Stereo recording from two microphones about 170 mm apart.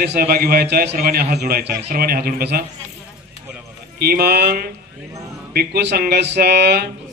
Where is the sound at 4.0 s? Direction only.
65° right (ahead or behind).